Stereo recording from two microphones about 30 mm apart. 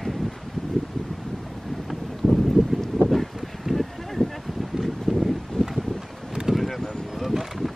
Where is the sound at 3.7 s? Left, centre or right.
Centre.